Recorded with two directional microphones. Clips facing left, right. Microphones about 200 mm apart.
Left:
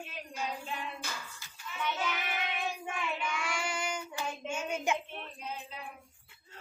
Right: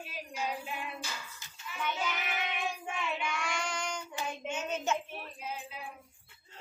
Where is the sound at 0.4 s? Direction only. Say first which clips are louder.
Right 1 dB; 10° right (ahead or behind); by 4.9 s 10° left (ahead or behind).